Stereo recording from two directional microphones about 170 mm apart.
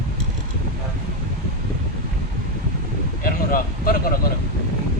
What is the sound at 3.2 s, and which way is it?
Speech, 60° left (ahead or behind).